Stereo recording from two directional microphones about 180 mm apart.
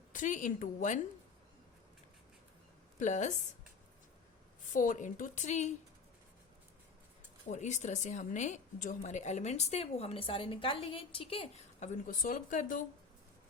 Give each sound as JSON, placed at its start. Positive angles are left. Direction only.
{"t": 0.1, "sound": "a woman's voice", "side_deg": 45}
{"t": 3.0, "sound": "a woman's voice", "side_deg": 40}
{"t": 4.7, "sound": "a woman's voice", "side_deg": 45}
{"t": 7.4, "sound": "a woman's voice", "side_deg": 40}